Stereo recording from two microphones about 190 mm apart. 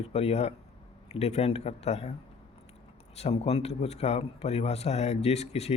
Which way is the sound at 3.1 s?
35° left (ahead or behind).